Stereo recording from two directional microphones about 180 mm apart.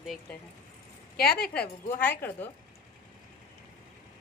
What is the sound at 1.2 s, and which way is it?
Speech, 60° left (ahead or behind).